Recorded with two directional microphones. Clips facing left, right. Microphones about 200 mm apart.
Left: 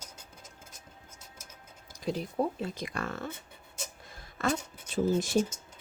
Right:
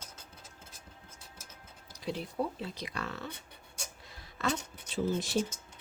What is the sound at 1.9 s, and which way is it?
Speech, 45° left (ahead or behind).